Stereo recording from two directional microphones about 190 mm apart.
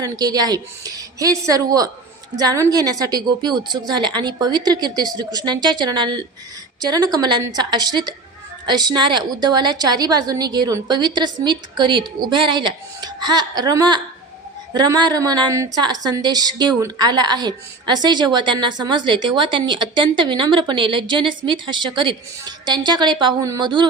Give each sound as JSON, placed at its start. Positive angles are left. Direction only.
{"t": 0.0, "sound": "a woman's voice", "side_deg": -20}